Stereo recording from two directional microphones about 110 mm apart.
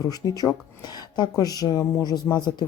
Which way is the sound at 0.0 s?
35° left (ahead or behind).